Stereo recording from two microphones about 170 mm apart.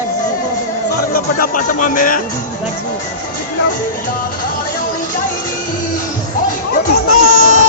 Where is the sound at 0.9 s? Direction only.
60° left (ahead or behind).